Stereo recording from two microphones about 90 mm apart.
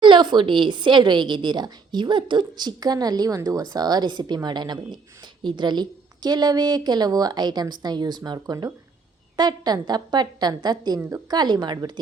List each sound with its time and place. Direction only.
0.0 s a woman's voice: 60° right (ahead or behind)